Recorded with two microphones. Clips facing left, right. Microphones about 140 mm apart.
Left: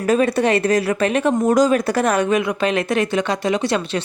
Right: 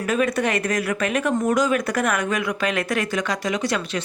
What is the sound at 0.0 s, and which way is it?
A woman's voice, 35° left (ahead or behind).